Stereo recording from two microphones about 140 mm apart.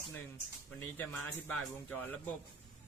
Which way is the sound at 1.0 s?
10° left (ahead or behind).